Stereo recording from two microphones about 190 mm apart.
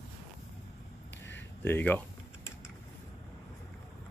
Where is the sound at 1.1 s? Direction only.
65° left (ahead or behind).